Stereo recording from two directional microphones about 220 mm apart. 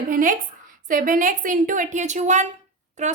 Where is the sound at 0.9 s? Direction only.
40° right (ahead or behind).